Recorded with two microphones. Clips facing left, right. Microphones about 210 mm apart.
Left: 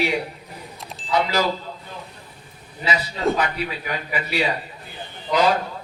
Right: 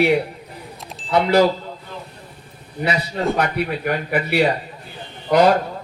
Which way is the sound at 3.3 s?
60° right (ahead or behind).